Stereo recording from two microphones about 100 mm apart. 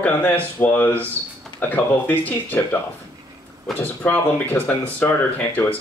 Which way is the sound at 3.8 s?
15° left (ahead or behind).